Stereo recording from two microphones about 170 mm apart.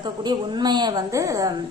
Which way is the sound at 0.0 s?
25° right (ahead or behind).